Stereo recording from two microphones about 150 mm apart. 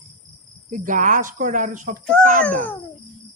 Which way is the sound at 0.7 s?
60° right (ahead or behind).